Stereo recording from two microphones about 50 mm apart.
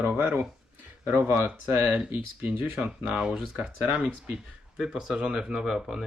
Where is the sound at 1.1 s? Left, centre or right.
Right.